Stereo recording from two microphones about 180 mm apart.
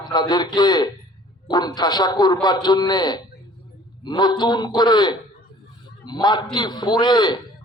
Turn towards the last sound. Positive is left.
turn(degrees=25)  # may be behind; listen again after turning